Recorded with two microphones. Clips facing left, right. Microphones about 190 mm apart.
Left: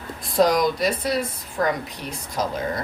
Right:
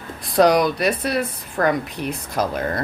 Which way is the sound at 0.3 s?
65° right (ahead or behind).